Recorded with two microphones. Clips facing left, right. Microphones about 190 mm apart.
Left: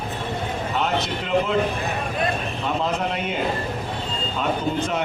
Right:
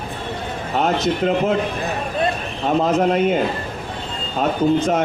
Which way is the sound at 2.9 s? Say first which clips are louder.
Right 9 dB; 45° right (ahead or behind).